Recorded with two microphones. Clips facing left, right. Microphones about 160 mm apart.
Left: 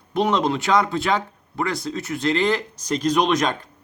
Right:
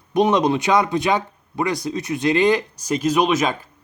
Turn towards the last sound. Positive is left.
turn(degrees=-5)  # may be behind; listen again after turning